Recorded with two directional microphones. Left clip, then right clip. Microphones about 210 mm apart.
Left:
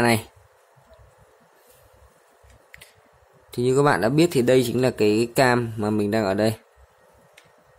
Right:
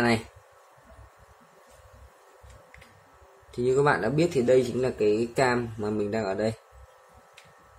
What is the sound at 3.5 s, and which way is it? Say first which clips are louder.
Speech: left 4 dB; 45° left (ahead or behind).